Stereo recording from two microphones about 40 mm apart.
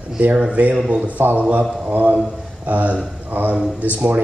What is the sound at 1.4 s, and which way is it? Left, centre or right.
Speech, right.